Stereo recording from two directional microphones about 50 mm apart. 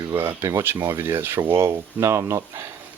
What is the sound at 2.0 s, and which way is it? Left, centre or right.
Speech, right.